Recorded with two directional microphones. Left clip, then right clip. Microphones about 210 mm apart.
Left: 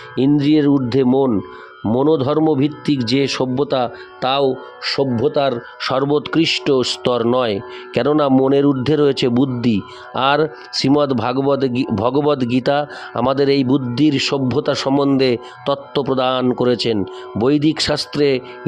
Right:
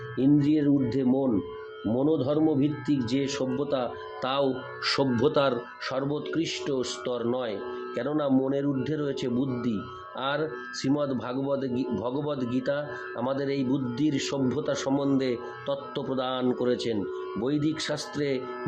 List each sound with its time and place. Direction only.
0.2 s speech: 55° left (ahead or behind); by 5.5 s 25° left (ahead or behind)
5.8 s speech: 50° left (ahead or behind)